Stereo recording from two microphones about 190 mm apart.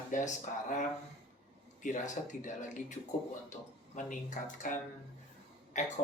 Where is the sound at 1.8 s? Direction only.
40° left (ahead or behind).